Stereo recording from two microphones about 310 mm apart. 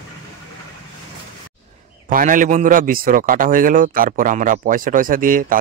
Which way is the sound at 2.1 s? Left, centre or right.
Right.